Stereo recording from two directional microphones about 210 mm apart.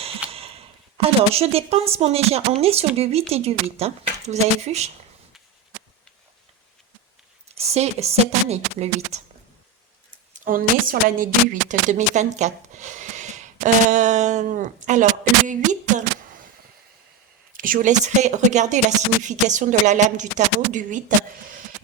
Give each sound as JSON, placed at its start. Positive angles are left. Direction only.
{"t": 0.3, "sound": "a woman's voice", "side_deg": -25}
{"t": 7.4, "sound": "speech", "side_deg": -30}
{"t": 10.3, "sound": "speech", "side_deg": -40}
{"t": 17.5, "sound": "speech", "side_deg": -40}